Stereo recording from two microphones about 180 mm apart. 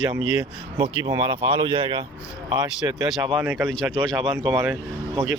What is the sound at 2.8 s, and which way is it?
Speech, 15° right (ahead or behind).